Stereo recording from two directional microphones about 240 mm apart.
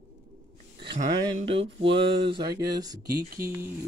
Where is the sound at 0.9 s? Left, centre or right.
Right.